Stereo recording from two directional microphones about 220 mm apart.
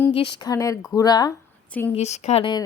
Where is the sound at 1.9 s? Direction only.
30° left (ahead or behind).